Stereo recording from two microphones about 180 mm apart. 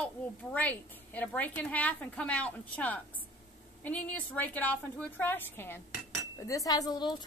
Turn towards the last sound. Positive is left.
turn(degrees=25)  # may be behind; listen again after turning